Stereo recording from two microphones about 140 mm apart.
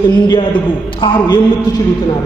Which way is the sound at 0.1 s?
30° left (ahead or behind).